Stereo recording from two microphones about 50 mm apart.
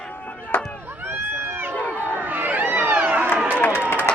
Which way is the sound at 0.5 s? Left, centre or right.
Left.